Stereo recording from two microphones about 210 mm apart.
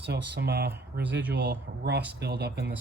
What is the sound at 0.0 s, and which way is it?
Speech, 50° right (ahead or behind).